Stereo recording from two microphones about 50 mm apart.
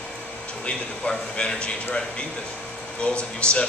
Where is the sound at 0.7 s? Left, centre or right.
Left.